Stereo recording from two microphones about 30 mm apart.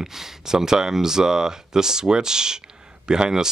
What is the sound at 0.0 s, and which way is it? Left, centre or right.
Speech, centre.